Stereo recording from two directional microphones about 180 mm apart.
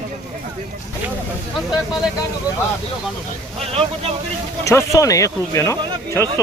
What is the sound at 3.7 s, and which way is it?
Speech, 35° right (ahead or behind).